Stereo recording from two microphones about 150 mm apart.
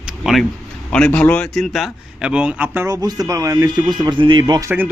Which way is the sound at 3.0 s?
25° right (ahead or behind).